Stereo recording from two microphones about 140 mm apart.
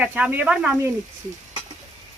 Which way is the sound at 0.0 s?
10° right (ahead or behind).